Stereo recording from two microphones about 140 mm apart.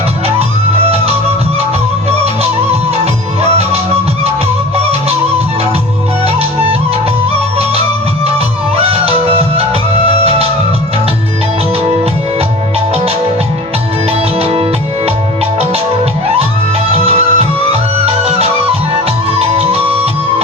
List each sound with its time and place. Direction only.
2.0 s music: 50° right (ahead or behind)
4.8 s music: 45° right (ahead or behind)
6.2 s music: 45° right (ahead or behind)
8.7 s music: 45° right (ahead or behind)
14.1 s music: 45° right (ahead or behind)
16.9 s music: 45° right (ahead or behind)